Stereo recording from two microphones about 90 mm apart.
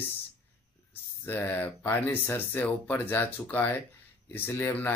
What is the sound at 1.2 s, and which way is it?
Speech, 20° left (ahead or behind).